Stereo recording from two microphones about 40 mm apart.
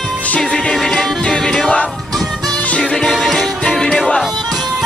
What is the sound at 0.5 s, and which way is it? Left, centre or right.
Music, centre.